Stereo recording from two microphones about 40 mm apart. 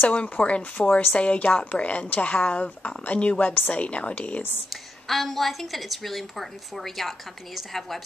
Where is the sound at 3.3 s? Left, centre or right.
Left.